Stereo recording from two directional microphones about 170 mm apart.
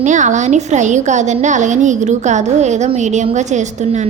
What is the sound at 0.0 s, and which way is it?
A woman's voice, 45° right (ahead or behind).